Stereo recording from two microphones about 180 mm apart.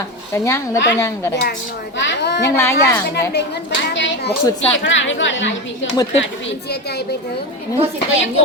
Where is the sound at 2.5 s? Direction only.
15° left (ahead or behind).